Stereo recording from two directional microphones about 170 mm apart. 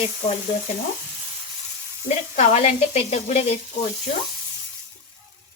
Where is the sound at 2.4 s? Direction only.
40° left (ahead or behind).